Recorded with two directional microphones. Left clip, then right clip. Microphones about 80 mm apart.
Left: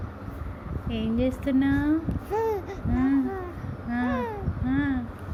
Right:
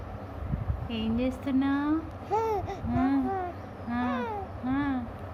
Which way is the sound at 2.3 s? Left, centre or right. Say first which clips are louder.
Left 1 dB; right.